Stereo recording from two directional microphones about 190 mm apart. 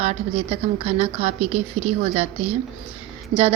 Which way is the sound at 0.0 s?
30° right (ahead or behind).